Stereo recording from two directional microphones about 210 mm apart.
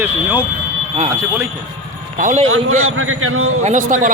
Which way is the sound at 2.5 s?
80° right.